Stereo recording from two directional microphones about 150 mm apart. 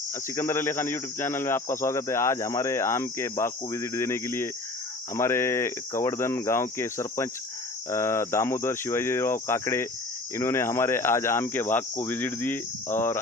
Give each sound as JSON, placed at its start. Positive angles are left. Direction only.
{"t": 0.4, "sound": "speech", "side_deg": 15}